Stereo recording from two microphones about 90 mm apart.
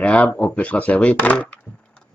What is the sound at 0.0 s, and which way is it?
A man's voice, 15° left (ahead or behind).